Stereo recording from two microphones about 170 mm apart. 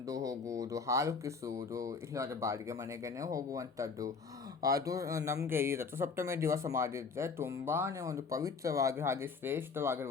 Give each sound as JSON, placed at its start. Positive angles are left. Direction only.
{"t": 0.1, "sound": "speech", "side_deg": -20}